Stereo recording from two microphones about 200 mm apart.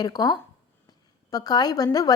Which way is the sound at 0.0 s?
20° left (ahead or behind).